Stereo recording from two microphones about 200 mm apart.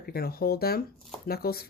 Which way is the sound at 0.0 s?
50° left (ahead or behind).